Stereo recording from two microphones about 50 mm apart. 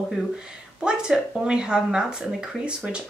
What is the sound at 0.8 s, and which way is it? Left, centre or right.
Speech, centre.